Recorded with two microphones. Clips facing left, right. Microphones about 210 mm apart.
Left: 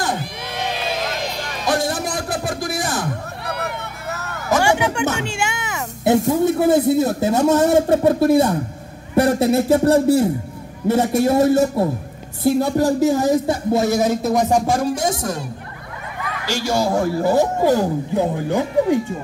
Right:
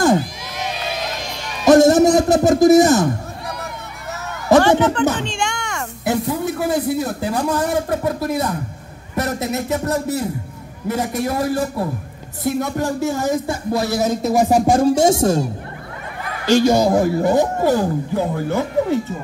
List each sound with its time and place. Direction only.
1.7 s speech: 45° right (ahead or behind)
3.4 s a sound: 65° left (ahead or behind)
4.6 s speech: 10° left (ahead or behind)
6.1 s speech: 45° left (ahead or behind)
6.4 s speech: 25° left (ahead or behind)
13.5 s speech: 25° left (ahead or behind)
14.2 s music: 5° right (ahead or behind)
14.7 s speech: 25° right (ahead or behind)
16.4 s speech: 20° right (ahead or behind)
17.3 s speech: 10° left (ahead or behind)